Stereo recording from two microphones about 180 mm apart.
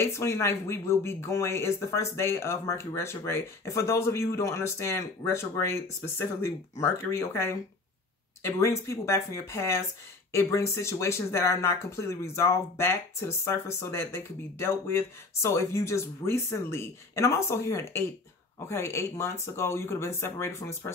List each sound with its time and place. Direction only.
0.0 s speech: 15° left (ahead or behind)